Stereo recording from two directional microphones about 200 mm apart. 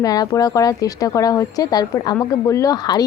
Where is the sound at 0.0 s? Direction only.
20° left (ahead or behind).